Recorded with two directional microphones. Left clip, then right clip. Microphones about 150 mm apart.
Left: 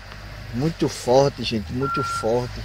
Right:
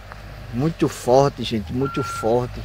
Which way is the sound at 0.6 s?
15° right (ahead or behind).